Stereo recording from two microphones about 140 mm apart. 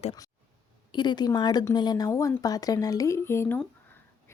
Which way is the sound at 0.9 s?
30° left (ahead or behind).